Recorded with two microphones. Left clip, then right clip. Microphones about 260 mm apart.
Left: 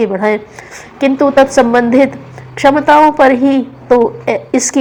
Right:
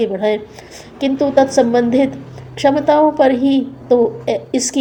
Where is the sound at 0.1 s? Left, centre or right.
Centre.